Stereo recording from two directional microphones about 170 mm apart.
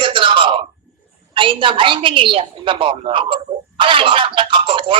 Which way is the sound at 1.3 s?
30° right (ahead or behind).